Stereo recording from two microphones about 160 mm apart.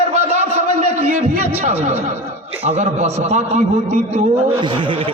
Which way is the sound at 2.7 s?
45° right (ahead or behind).